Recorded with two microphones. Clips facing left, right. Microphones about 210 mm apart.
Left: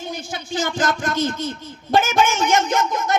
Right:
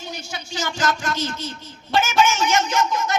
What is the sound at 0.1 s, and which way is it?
Speech, 50° left (ahead or behind).